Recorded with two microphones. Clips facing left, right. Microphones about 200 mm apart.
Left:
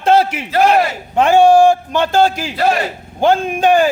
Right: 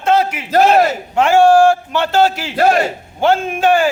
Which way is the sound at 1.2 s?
20° left (ahead or behind).